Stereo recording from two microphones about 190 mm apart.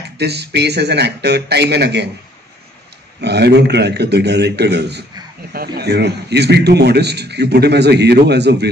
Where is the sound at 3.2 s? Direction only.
60° right (ahead or behind).